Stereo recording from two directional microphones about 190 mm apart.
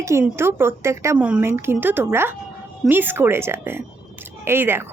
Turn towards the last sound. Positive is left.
turn(degrees=-10)  # may be behind; listen again after turning